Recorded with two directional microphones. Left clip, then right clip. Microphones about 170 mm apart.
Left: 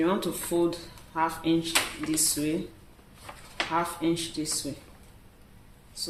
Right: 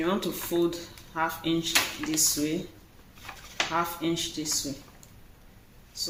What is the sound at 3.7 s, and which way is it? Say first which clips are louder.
Speech: left 3 dB; 30° left (ahead or behind).